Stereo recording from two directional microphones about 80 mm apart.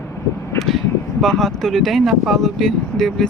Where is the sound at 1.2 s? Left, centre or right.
Centre.